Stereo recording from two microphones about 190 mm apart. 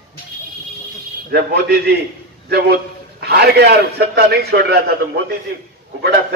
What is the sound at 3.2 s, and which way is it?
A man's voice, 55° right (ahead or behind).